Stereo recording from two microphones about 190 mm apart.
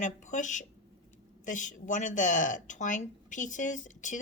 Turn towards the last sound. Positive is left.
turn(degrees=40)  # may be behind; listen again after turning